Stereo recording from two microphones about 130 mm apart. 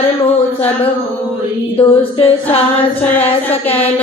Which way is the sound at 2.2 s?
45° left (ahead or behind).